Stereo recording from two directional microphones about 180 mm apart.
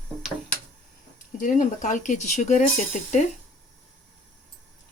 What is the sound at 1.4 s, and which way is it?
Speech, 45° left (ahead or behind).